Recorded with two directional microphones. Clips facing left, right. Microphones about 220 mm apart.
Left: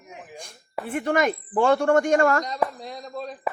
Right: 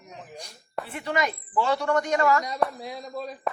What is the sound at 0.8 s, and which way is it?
Speech, 50° left (ahead or behind).